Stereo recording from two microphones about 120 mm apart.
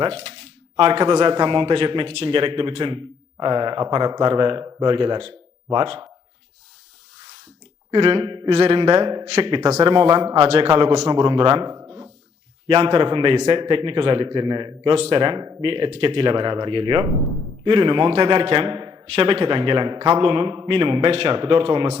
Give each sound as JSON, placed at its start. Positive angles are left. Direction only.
{"t": 0.0, "sound": "a man's voice", "side_deg": -55}
{"t": 7.9, "sound": "a man's voice", "side_deg": -45}
{"t": 8.4, "sound": "a man's voice", "side_deg": -60}
{"t": 9.2, "sound": "speech", "side_deg": -65}
{"t": 9.8, "sound": "a man's voice", "side_deg": -45}
{"t": 11.1, "sound": "a man's voice", "side_deg": -40}
{"t": 14.9, "sound": "a man's voice", "side_deg": -55}
{"t": 19.1, "sound": "a man's voice", "side_deg": -50}